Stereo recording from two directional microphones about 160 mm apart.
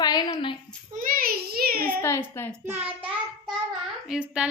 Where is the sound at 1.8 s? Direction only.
15° left (ahead or behind).